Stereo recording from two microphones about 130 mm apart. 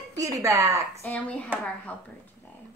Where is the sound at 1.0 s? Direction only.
10° left (ahead or behind).